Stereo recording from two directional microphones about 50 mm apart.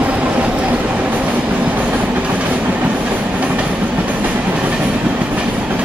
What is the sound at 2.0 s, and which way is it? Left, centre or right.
Train, right.